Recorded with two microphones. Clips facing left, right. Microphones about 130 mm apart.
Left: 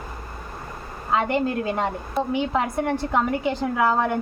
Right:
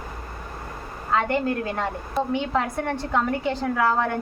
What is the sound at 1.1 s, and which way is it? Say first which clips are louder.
A woman's voice: left 1 dB; 20° left (ahead or behind).